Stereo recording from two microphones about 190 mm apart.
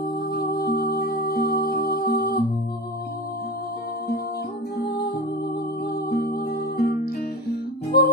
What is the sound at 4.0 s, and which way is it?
Music, 55° left (ahead or behind).